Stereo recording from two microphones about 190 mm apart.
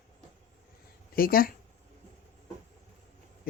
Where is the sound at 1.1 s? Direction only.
50° left (ahead or behind).